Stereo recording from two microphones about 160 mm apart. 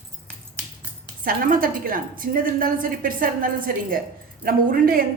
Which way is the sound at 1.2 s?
65° right (ahead or behind).